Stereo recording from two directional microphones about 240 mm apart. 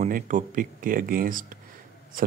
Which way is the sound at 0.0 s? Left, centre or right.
Right.